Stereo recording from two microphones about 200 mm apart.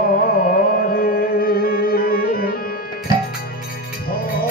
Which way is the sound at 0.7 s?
50° left (ahead or behind).